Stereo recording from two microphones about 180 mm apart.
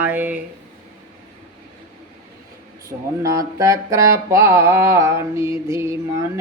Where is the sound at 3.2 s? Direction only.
15° right (ahead or behind).